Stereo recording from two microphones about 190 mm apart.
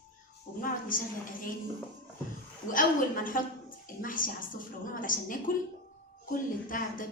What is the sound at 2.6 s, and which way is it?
A woman's voice, 45° left (ahead or behind).